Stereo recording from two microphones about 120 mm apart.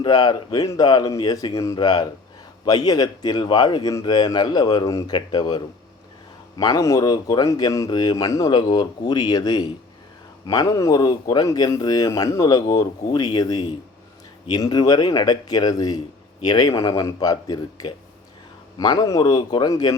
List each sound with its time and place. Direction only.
0.0 s speech: 35° left (ahead or behind)